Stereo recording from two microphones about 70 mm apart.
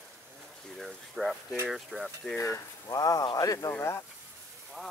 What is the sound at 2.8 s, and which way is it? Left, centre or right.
Speech, left.